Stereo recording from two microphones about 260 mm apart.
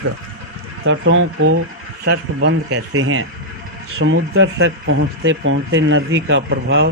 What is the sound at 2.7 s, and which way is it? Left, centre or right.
Speech, right.